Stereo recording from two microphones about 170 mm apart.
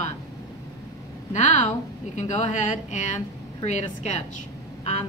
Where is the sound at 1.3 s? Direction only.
45° left (ahead or behind).